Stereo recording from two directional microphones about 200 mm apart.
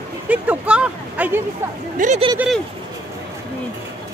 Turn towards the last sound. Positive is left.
turn(degrees=-5)  # may be behind; listen again after turning